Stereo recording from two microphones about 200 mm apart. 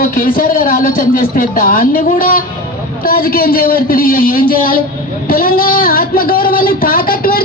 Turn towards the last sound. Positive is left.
turn(degrees=45)  # may be behind; listen again after turning